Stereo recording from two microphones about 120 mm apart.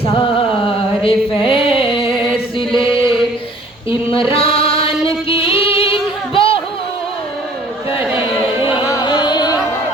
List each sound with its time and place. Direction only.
0.0 s a sound: 45° left (ahead or behind)
2.6 s chant: 45° left (ahead or behind)
4.1 s music: 50° left (ahead or behind)
8.9 s music: 35° left (ahead or behind)